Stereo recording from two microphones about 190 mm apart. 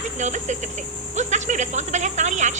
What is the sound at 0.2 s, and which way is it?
Speech, 40° right (ahead or behind).